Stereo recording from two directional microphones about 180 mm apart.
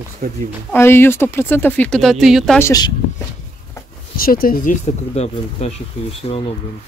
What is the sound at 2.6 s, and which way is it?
Speech, 20° left (ahead or behind).